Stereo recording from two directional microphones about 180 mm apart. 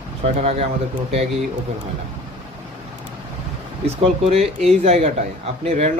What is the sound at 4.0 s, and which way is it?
Speech, 35° right (ahead or behind).